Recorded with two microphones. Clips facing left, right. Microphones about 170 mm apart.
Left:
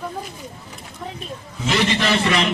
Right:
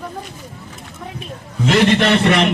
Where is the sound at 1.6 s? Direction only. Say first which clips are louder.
Right 6 dB; 60° right (ahead or behind).